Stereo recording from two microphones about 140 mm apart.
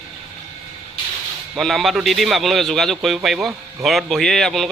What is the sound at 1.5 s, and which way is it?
A man's voice, centre (ahead or behind).